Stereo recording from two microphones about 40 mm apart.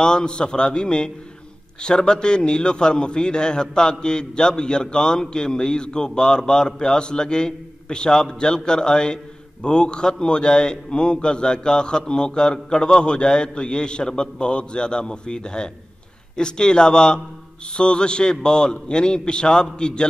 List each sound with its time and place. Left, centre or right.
0.0 s a man's voice: left